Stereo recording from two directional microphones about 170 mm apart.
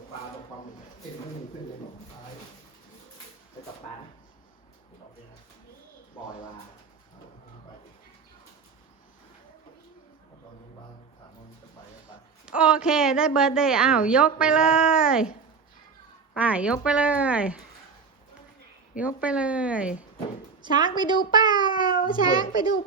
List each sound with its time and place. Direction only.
12.5 s a woman's voice: 5° right (ahead or behind)
16.3 s a woman's voice: 10° right (ahead or behind)
18.9 s speech: 5° right (ahead or behind)
20.9 s a child's voice: 25° right (ahead or behind)
21.8 s a child's voice: 55° left (ahead or behind)